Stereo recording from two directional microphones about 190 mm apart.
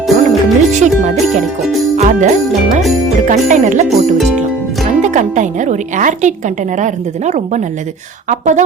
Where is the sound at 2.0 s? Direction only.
35° right (ahead or behind).